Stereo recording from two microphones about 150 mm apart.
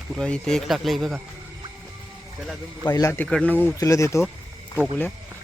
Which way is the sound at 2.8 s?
25° left (ahead or behind).